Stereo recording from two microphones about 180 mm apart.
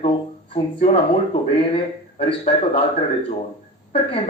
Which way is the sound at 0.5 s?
35° left (ahead or behind).